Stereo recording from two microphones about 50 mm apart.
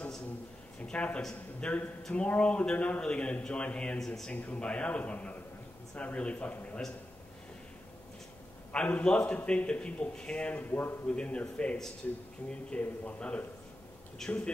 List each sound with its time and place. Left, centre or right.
0.8 s a man's voice: left
4.0 s speech: centre
4.3 s a man's voice: left
8.7 s a man's voice: left
10.7 s a man's voice: left
11.1 s a man's voice: left
14.2 s speech: centre